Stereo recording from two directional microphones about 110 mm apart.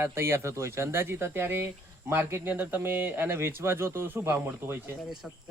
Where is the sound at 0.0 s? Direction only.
20° right (ahead or behind).